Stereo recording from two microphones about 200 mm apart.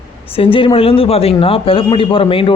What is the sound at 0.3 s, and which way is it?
A man's voice, 25° left (ahead or behind).